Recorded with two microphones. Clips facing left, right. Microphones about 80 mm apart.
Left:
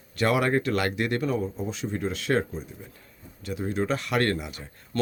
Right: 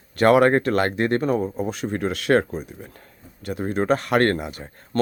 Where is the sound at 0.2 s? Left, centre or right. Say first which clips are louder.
Right 8 dB; right.